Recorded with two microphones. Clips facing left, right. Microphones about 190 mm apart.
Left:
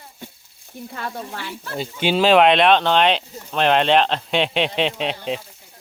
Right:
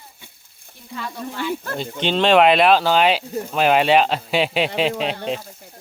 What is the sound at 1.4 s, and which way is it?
Speech, 50° right (ahead or behind).